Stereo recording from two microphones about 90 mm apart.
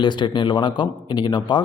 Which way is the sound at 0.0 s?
60° left (ahead or behind).